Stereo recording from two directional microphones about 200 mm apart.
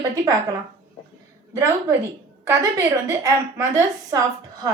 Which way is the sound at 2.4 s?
15° right (ahead or behind).